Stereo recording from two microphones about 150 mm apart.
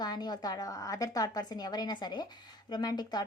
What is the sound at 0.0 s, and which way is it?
A woman's voice, 25° left (ahead or behind).